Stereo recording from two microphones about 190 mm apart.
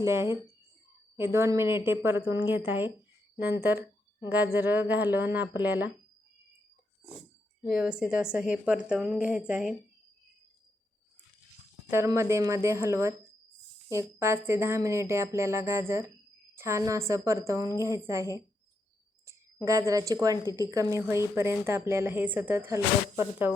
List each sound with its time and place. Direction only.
0.0 s a woman's voice: 15° right (ahead or behind)
7.6 s speech: 5° right (ahead or behind)
11.9 s a woman's voice: 15° right (ahead or behind)